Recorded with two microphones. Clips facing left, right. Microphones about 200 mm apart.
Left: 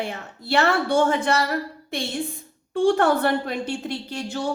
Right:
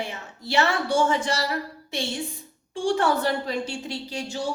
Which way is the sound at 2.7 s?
55° left (ahead or behind).